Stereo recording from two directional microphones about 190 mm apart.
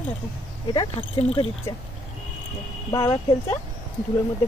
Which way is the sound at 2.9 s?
15° left (ahead or behind).